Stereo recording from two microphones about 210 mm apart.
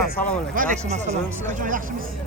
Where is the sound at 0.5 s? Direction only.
30° right (ahead or behind).